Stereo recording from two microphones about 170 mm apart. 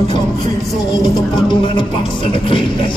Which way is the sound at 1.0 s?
25° left (ahead or behind).